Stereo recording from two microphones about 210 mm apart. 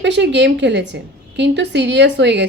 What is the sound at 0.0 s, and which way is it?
A woman's voice, 55° right (ahead or behind).